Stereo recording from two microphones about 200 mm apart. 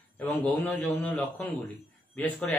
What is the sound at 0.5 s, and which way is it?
A man's voice, 5° left (ahead or behind).